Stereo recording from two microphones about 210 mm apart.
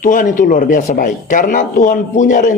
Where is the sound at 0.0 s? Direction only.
40° left (ahead or behind).